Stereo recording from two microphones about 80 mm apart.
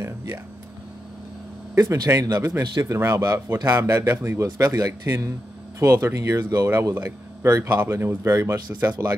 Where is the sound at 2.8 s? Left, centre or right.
Right.